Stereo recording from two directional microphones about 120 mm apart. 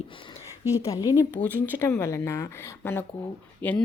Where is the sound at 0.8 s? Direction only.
30° left (ahead or behind).